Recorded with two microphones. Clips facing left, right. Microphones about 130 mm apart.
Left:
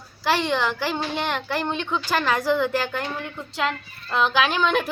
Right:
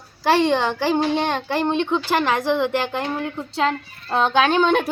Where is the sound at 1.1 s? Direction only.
25° right (ahead or behind).